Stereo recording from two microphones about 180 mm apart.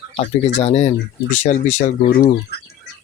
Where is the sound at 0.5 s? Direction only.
35° left (ahead or behind).